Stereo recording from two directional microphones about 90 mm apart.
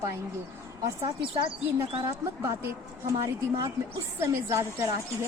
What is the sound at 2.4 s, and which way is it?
Speech, 30° right (ahead or behind).